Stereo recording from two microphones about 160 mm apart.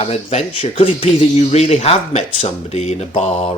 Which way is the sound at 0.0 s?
40° left (ahead or behind).